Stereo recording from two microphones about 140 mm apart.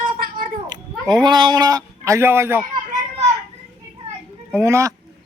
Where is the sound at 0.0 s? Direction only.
90° right.